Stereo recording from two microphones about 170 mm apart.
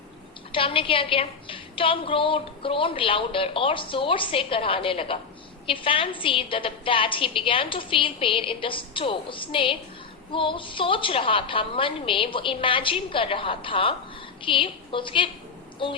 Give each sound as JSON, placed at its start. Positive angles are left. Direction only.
{"t": 0.5, "sound": "a woman's voice", "side_deg": 30}